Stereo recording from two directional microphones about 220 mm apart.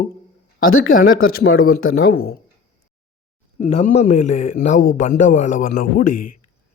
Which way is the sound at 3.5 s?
35° left (ahead or behind).